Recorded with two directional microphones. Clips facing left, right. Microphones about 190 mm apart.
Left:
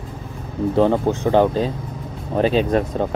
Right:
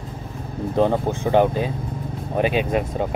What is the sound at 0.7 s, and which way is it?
Speech, 15° right (ahead or behind).